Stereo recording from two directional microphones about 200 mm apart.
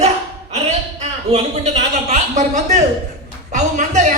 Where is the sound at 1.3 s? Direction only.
35° right (ahead or behind).